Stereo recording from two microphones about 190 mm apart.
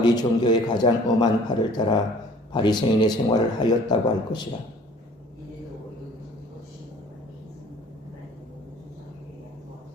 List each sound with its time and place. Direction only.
0.0 s a man's voice: 20° left (ahead or behind)